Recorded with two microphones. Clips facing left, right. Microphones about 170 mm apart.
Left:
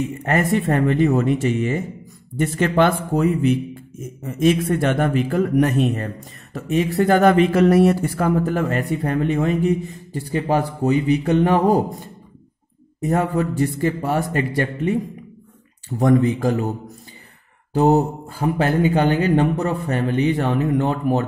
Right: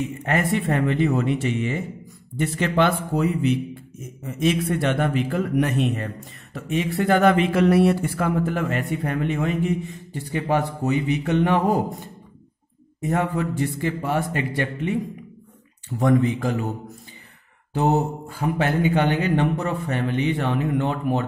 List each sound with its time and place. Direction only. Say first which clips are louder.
0.2 s a man's voice: left 3 dB; 40° left (ahead or behind)
13.0 s a man's voice: left 3 dB; 40° left (ahead or behind)
16.0 s a man's voice: left 3 dB; 40° left (ahead or behind)
17.7 s a man's voice: left 5 dB; 35° left (ahead or behind)